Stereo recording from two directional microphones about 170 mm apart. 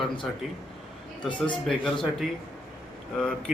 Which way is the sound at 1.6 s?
Centre (ahead or behind).